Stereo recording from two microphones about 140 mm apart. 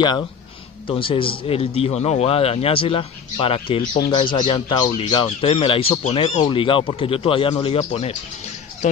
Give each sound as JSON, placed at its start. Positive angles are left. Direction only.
{"t": 0.8, "sound": "a man's voice", "side_deg": 40}